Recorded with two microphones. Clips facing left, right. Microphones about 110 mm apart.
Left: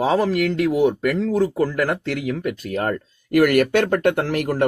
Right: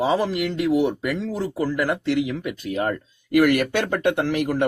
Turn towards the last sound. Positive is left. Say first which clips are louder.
# left 1 dB
turn(degrees=45)  # may be behind; listen again after turning